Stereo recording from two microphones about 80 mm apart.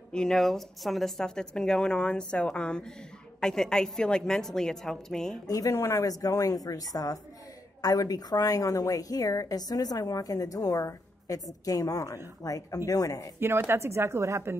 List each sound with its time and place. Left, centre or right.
0.1 s a woman's voice: centre
5.7 s speech: left
6.0 s a woman's voice: left
13.4 s speech: right